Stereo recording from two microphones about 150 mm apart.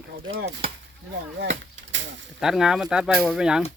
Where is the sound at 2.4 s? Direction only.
5° right (ahead or behind).